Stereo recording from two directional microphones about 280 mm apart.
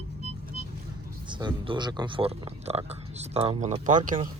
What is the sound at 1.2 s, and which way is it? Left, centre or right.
Speech, centre.